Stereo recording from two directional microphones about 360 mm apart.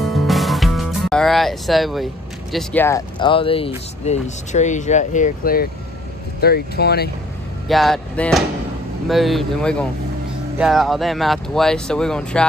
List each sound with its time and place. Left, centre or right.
0.0 s music: centre
2.5 s speech: centre; by 7.1 s left
7.6 s speech: centre